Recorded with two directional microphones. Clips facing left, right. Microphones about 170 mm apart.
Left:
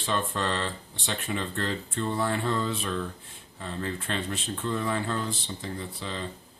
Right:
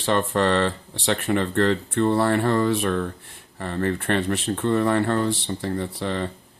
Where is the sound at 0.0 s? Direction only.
70° right (ahead or behind).